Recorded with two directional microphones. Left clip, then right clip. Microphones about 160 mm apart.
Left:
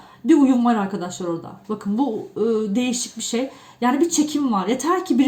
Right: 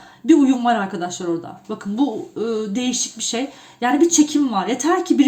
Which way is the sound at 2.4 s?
35° right (ahead or behind).